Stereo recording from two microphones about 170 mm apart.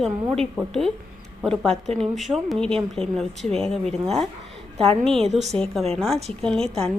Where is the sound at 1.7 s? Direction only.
40° right (ahead or behind).